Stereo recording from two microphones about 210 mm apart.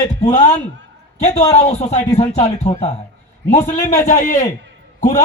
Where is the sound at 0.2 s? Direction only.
35° left (ahead or behind).